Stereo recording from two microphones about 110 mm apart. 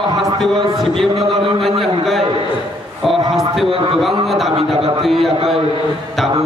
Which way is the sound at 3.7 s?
55° right (ahead or behind).